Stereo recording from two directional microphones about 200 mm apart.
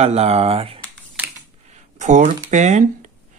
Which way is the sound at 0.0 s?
30° right (ahead or behind).